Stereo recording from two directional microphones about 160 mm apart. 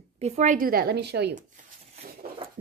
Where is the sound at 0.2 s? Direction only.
50° right (ahead or behind); by 1.3 s 90° right.